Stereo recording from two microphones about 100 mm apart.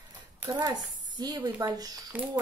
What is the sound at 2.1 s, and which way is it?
Speech, 15° right (ahead or behind).